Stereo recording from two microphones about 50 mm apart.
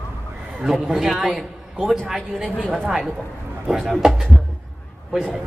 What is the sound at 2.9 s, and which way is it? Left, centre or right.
A man's voice, centre.